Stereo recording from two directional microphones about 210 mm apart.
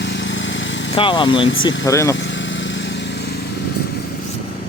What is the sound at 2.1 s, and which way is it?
Vehicle, 60° left (ahead or behind).